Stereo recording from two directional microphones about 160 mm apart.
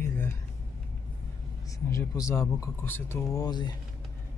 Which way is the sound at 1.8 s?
20° left (ahead or behind).